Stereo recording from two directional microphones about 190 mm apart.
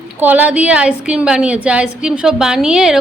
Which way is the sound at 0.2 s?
10° right (ahead or behind).